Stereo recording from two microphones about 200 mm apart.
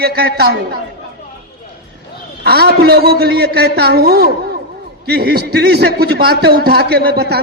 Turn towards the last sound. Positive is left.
turn(degrees=-55)  # may be behind; listen again after turning